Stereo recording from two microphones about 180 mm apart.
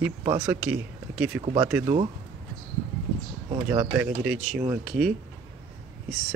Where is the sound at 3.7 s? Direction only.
10° right (ahead or behind).